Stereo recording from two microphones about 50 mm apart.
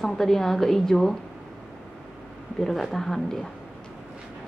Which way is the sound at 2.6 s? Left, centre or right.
Centre.